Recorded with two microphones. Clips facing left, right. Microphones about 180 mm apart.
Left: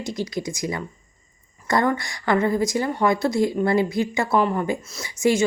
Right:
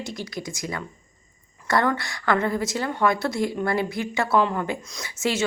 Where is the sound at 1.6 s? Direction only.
15° left (ahead or behind).